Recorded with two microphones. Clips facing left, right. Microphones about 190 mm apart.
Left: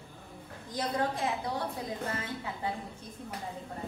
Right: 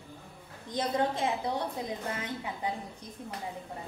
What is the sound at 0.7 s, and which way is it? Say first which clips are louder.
Speech: right 2 dB; 20° right (ahead or behind).